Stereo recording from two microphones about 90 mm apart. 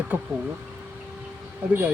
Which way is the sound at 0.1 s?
20° right (ahead or behind).